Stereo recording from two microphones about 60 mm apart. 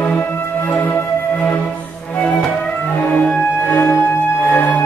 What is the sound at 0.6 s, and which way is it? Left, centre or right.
Music, left.